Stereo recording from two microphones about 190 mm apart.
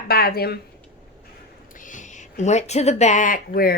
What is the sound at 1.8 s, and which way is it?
A woman's voice, 40° left (ahead or behind).